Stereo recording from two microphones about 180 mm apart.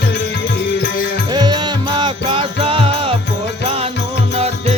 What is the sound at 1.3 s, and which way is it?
Music, 25° right (ahead or behind).